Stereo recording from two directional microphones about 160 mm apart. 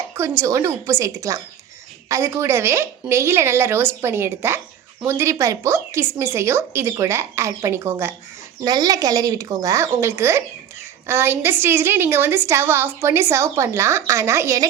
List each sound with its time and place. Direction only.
0.1 s a woman's voice: 15° right (ahead or behind)